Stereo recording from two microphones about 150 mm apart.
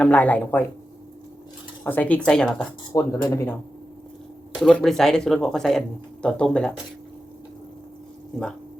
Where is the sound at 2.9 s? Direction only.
20° left (ahead or behind).